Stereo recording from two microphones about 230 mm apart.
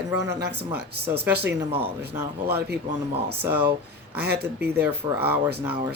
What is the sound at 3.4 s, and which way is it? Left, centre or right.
Speech, centre.